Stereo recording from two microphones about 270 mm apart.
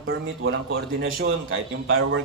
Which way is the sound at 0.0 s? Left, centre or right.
Right.